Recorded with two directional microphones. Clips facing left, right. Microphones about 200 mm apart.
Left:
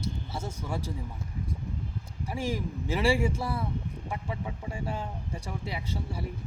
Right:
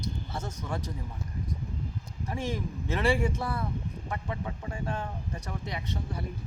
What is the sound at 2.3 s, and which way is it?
Speech, 10° left (ahead or behind).